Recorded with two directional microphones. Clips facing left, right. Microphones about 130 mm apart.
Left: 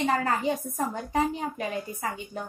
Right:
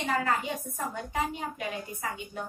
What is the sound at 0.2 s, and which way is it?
A woman's voice, 40° left (ahead or behind).